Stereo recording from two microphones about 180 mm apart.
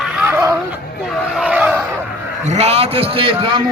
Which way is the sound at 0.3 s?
10° right (ahead or behind).